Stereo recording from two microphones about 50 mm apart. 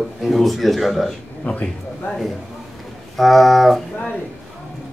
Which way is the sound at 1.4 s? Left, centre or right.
Left.